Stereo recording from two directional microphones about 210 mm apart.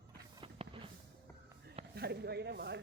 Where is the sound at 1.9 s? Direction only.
50° right (ahead or behind).